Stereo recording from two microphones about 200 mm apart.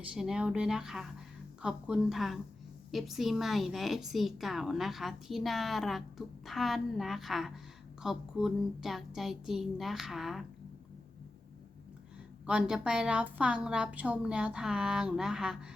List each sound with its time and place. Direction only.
0.0 s a woman's voice: 5° right (ahead or behind)
12.5 s a woman's voice: 5° right (ahead or behind)